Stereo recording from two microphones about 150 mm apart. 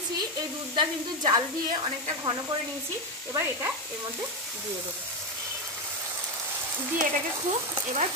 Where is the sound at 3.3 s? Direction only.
15° right (ahead or behind).